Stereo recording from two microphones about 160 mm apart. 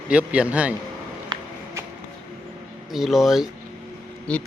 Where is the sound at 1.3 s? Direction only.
25° right (ahead or behind).